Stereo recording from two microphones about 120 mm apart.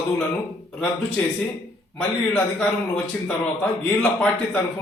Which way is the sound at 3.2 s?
15° left (ahead or behind).